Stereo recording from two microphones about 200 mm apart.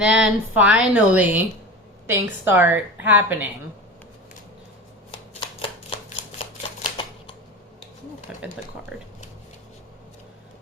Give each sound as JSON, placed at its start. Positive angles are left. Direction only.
{"t": 0.0, "sound": "a woman's voice", "side_deg": -5}
{"t": 5.1, "sound": "shuffling cards", "side_deg": 25}
{"t": 6.4, "sound": "typewriter", "side_deg": 25}
{"t": 8.3, "sound": "a sound", "side_deg": -5}
{"t": 8.9, "sound": "a woman's voice", "side_deg": 0}